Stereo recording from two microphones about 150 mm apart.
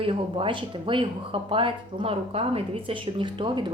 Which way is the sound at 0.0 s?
35° right (ahead or behind).